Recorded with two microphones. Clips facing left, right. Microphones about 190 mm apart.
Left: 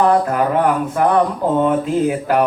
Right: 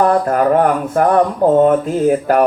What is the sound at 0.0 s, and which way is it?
Speech, 45° right (ahead or behind).